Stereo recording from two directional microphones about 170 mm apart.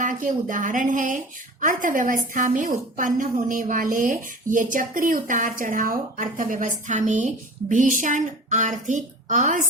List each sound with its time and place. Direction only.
0.0 s a woman's voice: 50° right (ahead or behind)